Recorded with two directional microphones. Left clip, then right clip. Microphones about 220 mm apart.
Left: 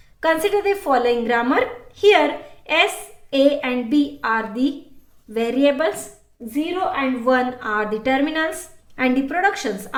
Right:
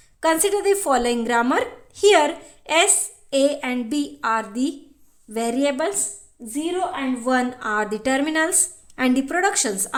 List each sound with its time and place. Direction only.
0.2 s speech: 45° right (ahead or behind)